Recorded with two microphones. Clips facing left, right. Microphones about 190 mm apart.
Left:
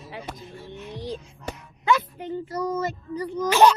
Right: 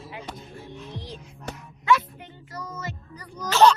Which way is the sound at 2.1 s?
35° left (ahead or behind).